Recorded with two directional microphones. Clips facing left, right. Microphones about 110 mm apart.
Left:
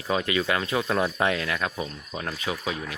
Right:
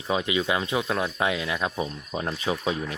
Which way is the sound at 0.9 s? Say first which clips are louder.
Left 2 dB; centre (ahead or behind).